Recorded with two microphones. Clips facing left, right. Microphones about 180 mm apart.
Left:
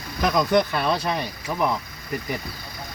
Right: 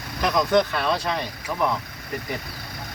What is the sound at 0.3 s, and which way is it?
Speech, 10° left (ahead or behind).